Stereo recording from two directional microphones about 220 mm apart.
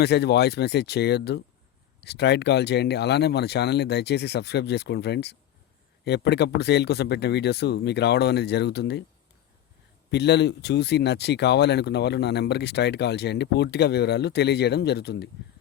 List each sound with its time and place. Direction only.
0.0 s speech: 50° left (ahead or behind)
10.1 s speech: 50° left (ahead or behind)